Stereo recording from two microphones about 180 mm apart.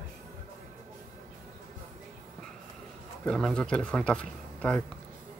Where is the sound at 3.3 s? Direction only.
5° left (ahead or behind).